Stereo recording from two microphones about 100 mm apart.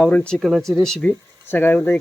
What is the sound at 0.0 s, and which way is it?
Speech, 10° left (ahead or behind).